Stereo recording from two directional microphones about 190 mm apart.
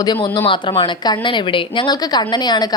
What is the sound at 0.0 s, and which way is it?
A woman's voice, 20° left (ahead or behind).